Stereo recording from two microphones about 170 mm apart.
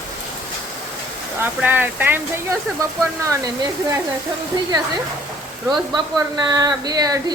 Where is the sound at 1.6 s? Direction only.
10° right (ahead or behind).